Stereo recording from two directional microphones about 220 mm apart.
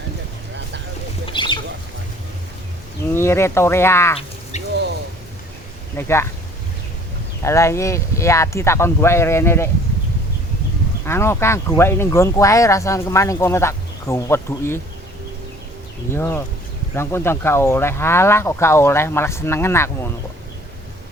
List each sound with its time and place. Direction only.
1.3 s bird: 20° left (ahead or behind)
3.1 s speech: 10° left (ahead or behind)
4.5 s a sound: 30° left (ahead or behind)
6.0 s speech: 10° left (ahead or behind)
7.4 s speech: 15° left (ahead or behind)
11.0 s speech: 10° left (ahead or behind)
16.1 s speech: 10° left (ahead or behind)